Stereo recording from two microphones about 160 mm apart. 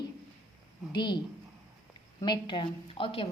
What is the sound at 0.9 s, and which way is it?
Speech, 30° left (ahead or behind).